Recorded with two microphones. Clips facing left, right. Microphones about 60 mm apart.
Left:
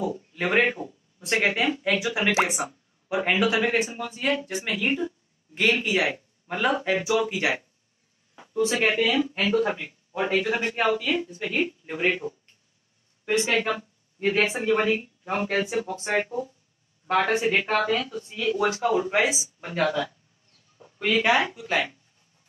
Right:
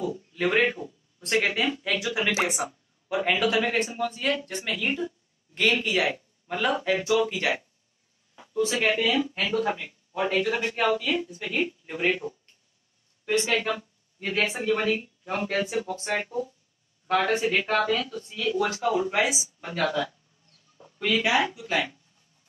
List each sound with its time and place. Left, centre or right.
0.0 s speech: centre
2.4 s speech: centre
13.5 s speech: centre